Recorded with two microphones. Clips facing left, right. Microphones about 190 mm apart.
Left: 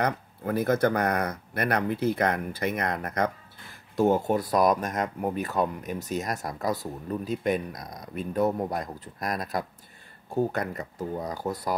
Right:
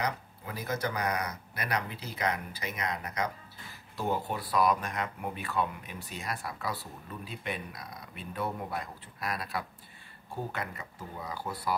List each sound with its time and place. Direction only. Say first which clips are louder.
0.0 s speech: left 7 dB; 55° left (ahead or behind)